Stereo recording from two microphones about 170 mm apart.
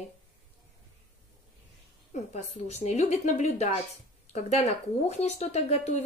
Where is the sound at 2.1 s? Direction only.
40° left (ahead or behind).